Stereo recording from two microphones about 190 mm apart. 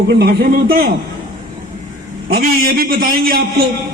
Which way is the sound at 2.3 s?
50° right (ahead or behind).